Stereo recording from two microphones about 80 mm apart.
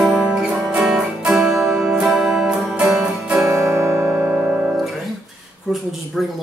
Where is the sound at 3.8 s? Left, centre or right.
Right.